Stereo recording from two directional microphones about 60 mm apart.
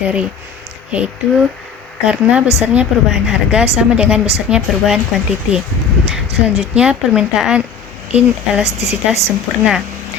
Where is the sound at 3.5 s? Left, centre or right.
Centre.